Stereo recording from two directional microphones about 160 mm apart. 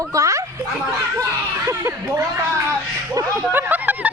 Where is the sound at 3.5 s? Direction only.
10° right (ahead or behind).